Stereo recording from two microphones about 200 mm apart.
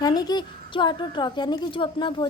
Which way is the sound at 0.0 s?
20° left (ahead or behind).